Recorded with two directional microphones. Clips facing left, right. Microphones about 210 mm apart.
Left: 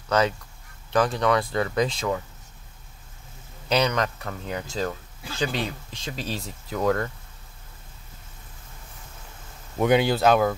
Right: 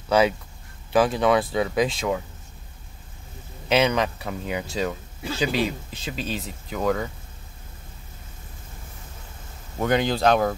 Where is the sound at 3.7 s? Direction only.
5° right (ahead or behind).